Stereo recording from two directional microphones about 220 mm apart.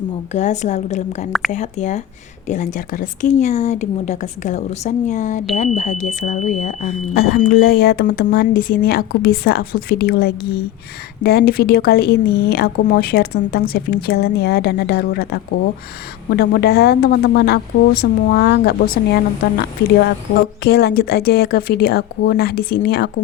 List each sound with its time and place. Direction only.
0.3 s speech: 30° left (ahead or behind)